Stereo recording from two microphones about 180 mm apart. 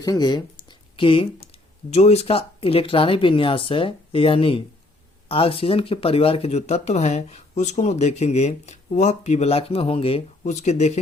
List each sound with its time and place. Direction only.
0.0 s speech: 20° left (ahead or behind); by 11.0 s 40° left (ahead or behind)